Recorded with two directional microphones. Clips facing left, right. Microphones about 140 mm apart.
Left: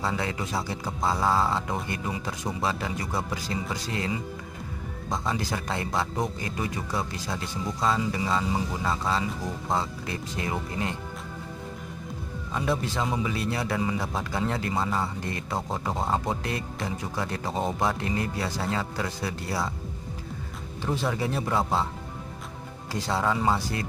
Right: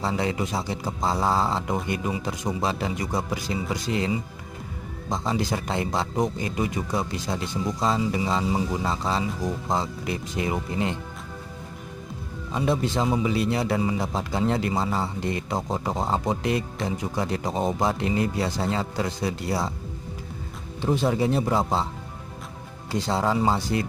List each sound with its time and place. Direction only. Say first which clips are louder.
0.0 s a man's voice: right 4 dB; 20° right (ahead or behind)
12.5 s a man's voice: right 4 dB; 20° right (ahead or behind)
20.8 s a man's voice: right 5 dB; 20° right (ahead or behind)
23.0 s a man's voice: right 2 dB; 25° right (ahead or behind)